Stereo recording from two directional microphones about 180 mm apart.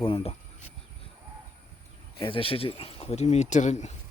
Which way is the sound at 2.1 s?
30° left (ahead or behind).